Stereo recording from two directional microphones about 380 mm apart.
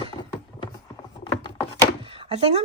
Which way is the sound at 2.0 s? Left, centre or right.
Centre.